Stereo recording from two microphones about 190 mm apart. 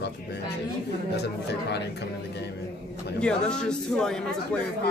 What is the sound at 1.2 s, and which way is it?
Speech, 60° left (ahead or behind).